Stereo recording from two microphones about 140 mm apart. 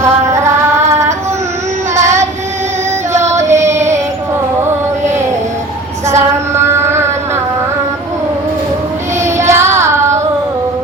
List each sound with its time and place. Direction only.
0.0 s music: 20° right (ahead or behind)
0.9 s child singing: 20° right (ahead or behind)
3.1 s music: 20° right (ahead or behind)
3.4 s carnatic music: 55° right (ahead or behind)
3.7 s music: 20° right (ahead or behind)
6.1 s child singing: 20° right (ahead or behind)
9.2 s child singing: 20° right (ahead or behind)